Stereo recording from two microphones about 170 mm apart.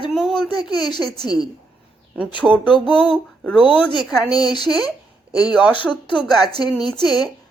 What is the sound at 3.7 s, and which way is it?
Speech, 25° left (ahead or behind).